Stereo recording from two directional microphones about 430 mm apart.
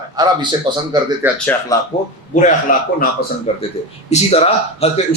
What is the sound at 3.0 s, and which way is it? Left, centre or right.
A man's voice, centre.